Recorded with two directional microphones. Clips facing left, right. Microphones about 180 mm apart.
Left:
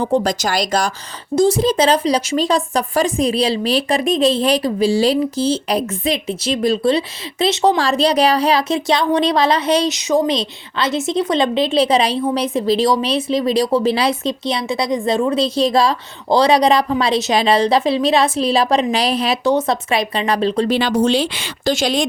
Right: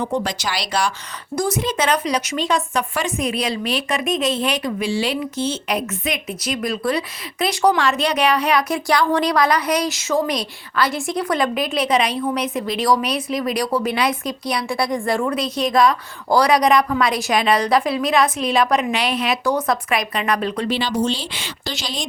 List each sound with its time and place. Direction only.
0.0 s speech: 35° left (ahead or behind)
1.4 s speech: 30° left (ahead or behind)
20.7 s speech: 50° left (ahead or behind)